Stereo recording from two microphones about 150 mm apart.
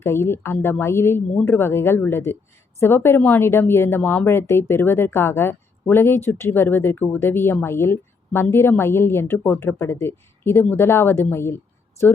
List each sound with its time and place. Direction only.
0.0 s speech: 15° left (ahead or behind)